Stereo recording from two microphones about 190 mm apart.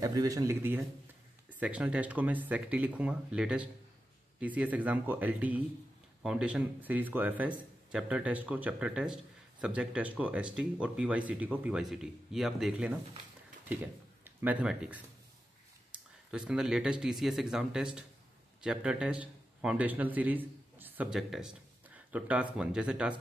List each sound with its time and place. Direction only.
0.0 s a man's voice: 20° right (ahead or behind)